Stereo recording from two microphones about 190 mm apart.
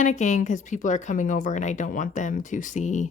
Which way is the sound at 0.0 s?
40° left (ahead or behind).